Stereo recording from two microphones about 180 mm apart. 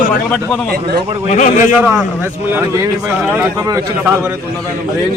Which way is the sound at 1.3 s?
40° left (ahead or behind).